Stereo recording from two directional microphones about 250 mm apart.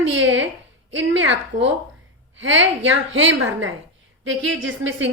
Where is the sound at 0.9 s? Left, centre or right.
Right.